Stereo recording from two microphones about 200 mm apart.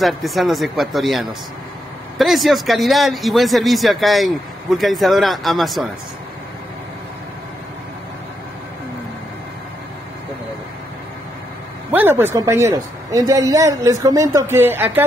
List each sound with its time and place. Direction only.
0.0 s speech: centre (ahead or behind)
11.9 s speech: 10° right (ahead or behind)